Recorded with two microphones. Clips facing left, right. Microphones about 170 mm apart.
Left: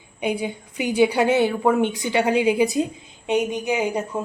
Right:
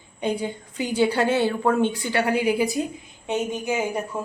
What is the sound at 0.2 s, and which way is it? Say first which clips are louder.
A woman's voice: left 1 dB; 10° left (ahead or behind).